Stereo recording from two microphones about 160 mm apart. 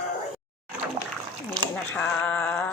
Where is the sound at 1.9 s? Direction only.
10° left (ahead or behind).